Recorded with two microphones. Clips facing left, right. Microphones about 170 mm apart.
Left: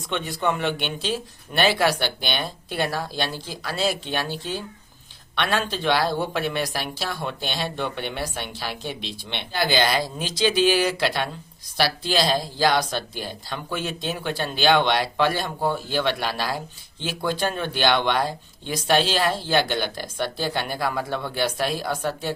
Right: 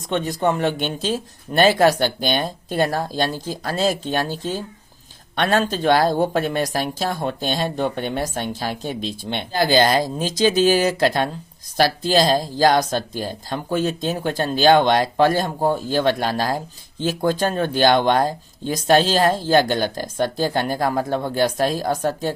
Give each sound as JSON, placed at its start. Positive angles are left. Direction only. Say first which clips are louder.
{"t": 0.1, "sound": "speech", "louder": "right 5 dB", "side_deg": -40}